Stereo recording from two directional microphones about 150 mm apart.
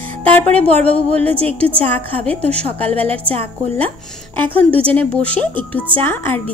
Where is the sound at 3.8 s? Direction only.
10° left (ahead or behind).